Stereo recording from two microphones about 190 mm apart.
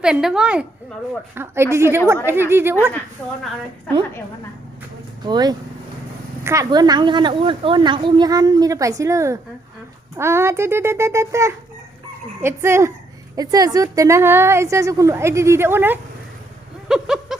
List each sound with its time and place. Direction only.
0.0 s a woman's voice: 5° right (ahead or behind)
3.2 s a woman's voice: 5° left (ahead or behind)
5.2 s a woman's voice: 20° right (ahead or behind)
16.9 s a sound: centre (ahead or behind)